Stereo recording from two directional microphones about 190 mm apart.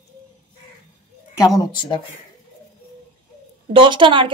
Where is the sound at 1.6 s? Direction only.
25° left (ahead or behind).